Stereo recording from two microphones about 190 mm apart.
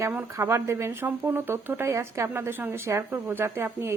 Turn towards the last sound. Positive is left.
turn(degrees=-10)  # may be behind; listen again after turning